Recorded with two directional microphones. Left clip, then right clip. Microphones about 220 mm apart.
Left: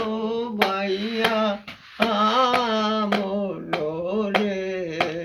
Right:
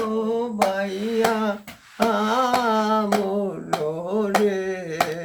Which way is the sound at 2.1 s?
25° right (ahead or behind).